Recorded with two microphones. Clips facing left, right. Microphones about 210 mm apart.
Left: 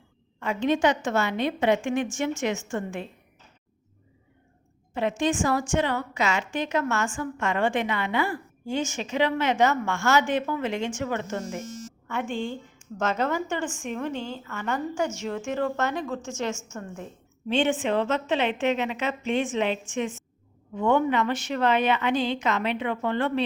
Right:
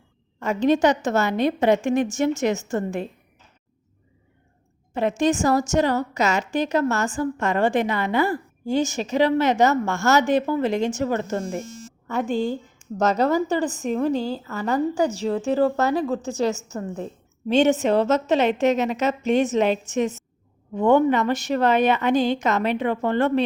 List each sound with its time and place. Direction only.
0.3 s a woman's voice: 40° right (ahead or behind)
4.9 s a woman's voice: 40° right (ahead or behind)